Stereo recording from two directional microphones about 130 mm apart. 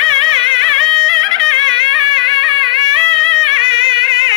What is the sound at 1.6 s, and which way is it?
Music, 40° right (ahead or behind).